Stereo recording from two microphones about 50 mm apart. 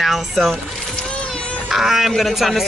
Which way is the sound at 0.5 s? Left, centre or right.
Centre.